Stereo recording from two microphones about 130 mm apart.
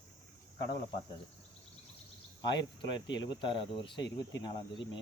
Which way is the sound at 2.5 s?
35° left (ahead or behind).